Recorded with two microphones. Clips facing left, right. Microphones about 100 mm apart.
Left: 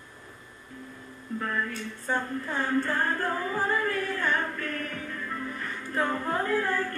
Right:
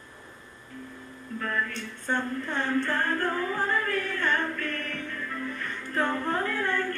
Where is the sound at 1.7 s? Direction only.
5° left (ahead or behind).